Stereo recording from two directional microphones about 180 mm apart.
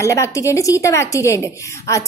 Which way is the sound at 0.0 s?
15° left (ahead or behind).